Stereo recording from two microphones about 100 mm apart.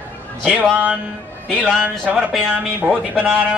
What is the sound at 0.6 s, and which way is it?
Speech, 15° right (ahead or behind).